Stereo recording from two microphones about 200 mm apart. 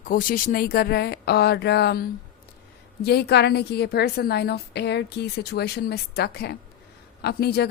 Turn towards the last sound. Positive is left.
turn(degrees=55)  # may be behind; listen again after turning